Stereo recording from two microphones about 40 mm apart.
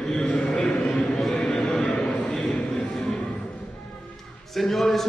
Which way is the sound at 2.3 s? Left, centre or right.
Left.